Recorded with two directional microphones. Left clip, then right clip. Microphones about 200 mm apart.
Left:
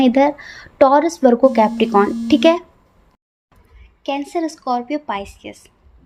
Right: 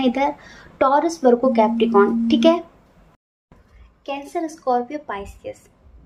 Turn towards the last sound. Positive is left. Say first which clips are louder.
# left 4 dB
turn(degrees=50)  # may be behind; listen again after turning